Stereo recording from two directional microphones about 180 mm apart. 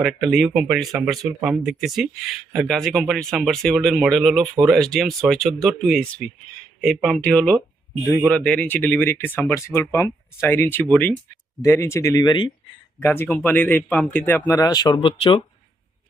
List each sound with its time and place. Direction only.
0.0 s speech: centre (ahead or behind); by 15.4 s 25° left (ahead or behind)